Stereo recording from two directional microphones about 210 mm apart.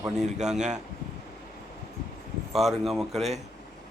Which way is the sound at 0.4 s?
5° right (ahead or behind).